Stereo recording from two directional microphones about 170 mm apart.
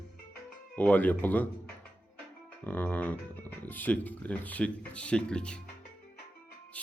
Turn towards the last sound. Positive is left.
turn(degrees=5)  # may be behind; listen again after turning